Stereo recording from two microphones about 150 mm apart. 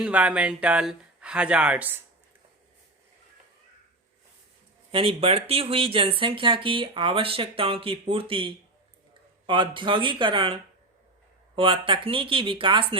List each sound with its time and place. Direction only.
0.0 s speech: 5° right (ahead or behind)
4.9 s speech: 35° right (ahead or behind)